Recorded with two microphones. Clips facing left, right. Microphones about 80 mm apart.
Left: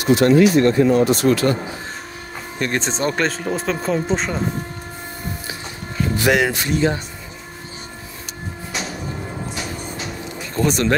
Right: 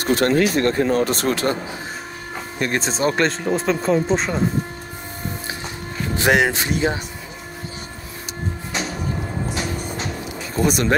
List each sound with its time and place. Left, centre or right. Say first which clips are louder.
0.0 s speech: left 4 dB; right
1.3 s speech: left 3 dB; right
2.6 s speech: right 1 dB; centre
6.1 s speech: right 1 dB; right
10.5 s speech: even; centre